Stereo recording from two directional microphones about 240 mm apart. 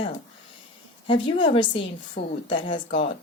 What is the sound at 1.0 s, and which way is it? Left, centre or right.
Speech, left.